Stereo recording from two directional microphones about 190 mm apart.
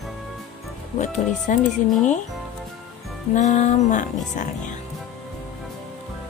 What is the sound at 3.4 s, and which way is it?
Speech, 40° left (ahead or behind).